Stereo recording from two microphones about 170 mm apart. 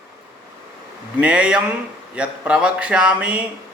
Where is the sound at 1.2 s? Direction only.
5° right (ahead or behind).